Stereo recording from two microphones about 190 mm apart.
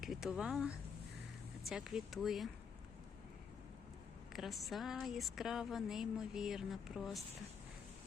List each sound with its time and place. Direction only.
0.0 s speech: centre (ahead or behind)
4.3 s speech: centre (ahead or behind)